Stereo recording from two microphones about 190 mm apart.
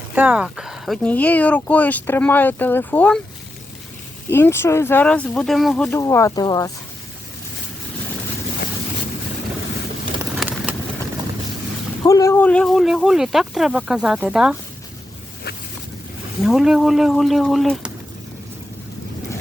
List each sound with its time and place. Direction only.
0.1 s speech: 5° right (ahead or behind); by 3.2 s 10° left (ahead or behind)
4.3 s speech: 15° left (ahead or behind)
12.0 s speech: 15° left (ahead or behind); by 14.5 s 5° right (ahead or behind)
16.4 s speech: centre (ahead or behind)